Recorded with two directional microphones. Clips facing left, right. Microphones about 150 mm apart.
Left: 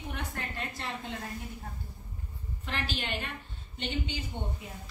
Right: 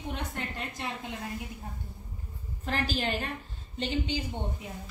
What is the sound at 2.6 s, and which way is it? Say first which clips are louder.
A woman's voice: right 5 dB; 40° right (ahead or behind).